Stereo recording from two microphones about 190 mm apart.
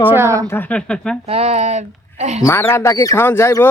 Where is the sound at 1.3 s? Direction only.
35° right (ahead or behind).